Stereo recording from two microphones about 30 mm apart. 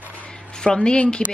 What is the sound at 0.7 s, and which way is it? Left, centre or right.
Speech, left.